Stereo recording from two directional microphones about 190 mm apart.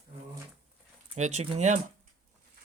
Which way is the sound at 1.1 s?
35° right (ahead or behind).